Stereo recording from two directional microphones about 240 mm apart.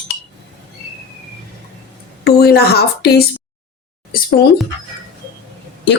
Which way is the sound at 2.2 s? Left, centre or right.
Left.